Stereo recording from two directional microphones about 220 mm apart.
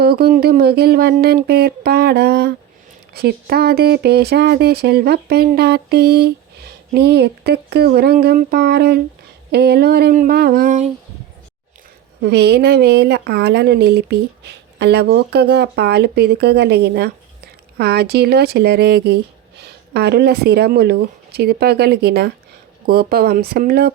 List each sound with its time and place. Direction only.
0.0 s speech: 45° right (ahead or behind)
12.2 s speech: 50° right (ahead or behind)